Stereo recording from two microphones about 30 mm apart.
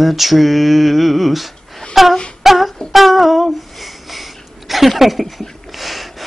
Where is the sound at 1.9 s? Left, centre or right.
Centre.